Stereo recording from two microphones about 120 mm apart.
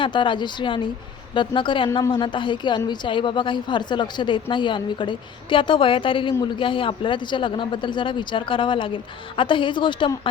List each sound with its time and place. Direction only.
0.0 s a woman's voice: 45° left (ahead or behind)